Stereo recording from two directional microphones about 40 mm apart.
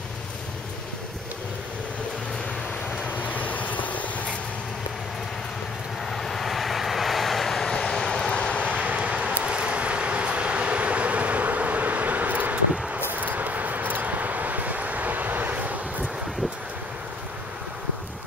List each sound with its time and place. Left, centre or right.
3.2 s vehicle: left
6.0 s vehicle: centre
8.3 s vehicle: left
8.7 s vehicle: right